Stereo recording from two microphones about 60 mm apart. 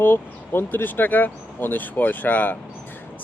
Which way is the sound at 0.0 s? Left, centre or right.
Left.